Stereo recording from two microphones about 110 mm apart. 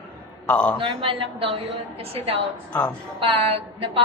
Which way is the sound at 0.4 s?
10° left (ahead or behind).